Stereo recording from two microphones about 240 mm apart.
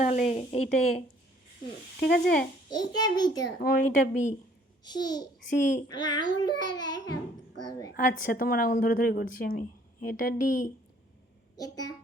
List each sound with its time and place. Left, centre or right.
0.0 s speech: left
2.0 s a woman's voice: left
2.6 s a child's voice: centre
3.4 s a woman's voice: left
4.8 s a child's voice: centre
8.2 s a woman's voice: left
11.5 s a child's voice: centre